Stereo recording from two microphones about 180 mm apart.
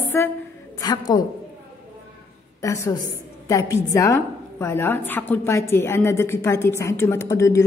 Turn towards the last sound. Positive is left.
turn(degrees=15)  # may be behind; listen again after turning